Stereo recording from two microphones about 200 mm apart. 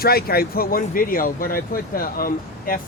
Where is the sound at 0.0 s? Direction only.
50° left (ahead or behind).